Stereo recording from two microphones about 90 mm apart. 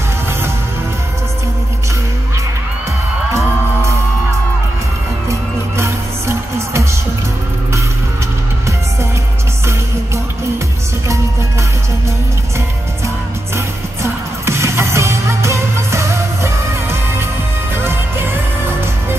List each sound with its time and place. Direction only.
5.3 s music: 30° right (ahead or behind)
14.0 s music: 30° right (ahead or behind)